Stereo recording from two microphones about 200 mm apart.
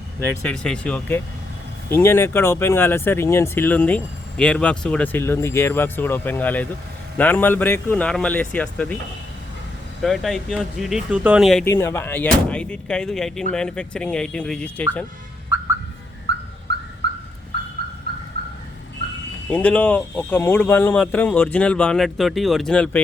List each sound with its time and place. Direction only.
0.3 s speech: 5° left (ahead or behind)
10.0 s speech: centre (ahead or behind)
11.6 s speech: 10° left (ahead or behind)
16.3 s car alarm: 55° right (ahead or behind)
19.5 s speech: 5° left (ahead or behind)